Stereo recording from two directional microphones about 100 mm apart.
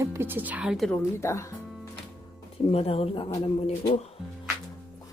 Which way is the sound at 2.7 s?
85° left.